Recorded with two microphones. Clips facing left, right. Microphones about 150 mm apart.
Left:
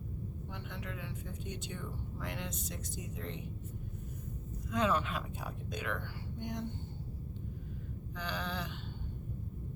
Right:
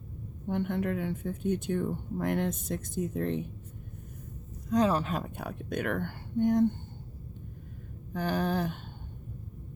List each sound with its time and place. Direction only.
0.4 s speech: 55° right (ahead or behind)
4.7 s speech: 35° right (ahead or behind)
5.4 s speech: 65° right (ahead or behind)
8.1 s speech: 45° right (ahead or behind)